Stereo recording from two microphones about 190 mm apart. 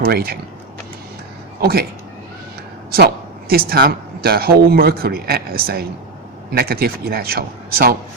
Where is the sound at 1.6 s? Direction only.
55° right (ahead or behind).